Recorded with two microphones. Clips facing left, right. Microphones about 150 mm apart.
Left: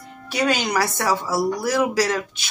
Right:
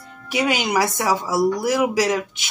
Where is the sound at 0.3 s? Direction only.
20° right (ahead or behind).